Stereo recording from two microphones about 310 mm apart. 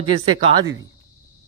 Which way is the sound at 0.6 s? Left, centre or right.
Right.